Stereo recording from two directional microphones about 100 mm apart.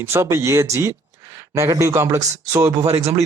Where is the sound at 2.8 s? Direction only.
90° right.